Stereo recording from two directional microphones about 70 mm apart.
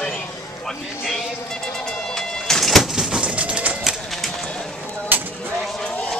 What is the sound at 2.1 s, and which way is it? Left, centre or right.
Music, centre.